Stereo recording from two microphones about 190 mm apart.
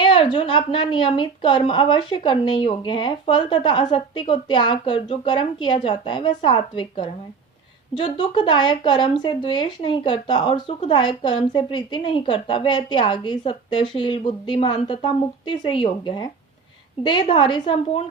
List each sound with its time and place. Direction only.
0.0 s a woman's voice: 25° left (ahead or behind)